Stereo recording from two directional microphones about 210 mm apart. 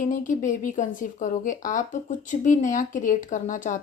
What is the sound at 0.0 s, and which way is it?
Speech, 35° left (ahead or behind).